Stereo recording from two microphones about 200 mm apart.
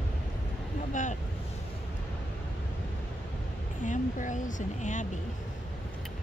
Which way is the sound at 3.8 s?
40° left (ahead or behind).